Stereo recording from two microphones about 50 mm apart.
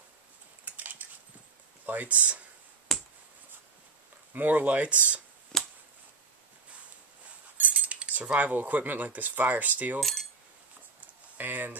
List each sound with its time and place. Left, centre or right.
0.7 s a sound: right
1.9 s speech: right
2.9 s a sound: centre
4.3 s speech: right
5.5 s finger snapping: centre
7.5 s cutlery: right
9.9 s speech: centre
11.3 s speech: right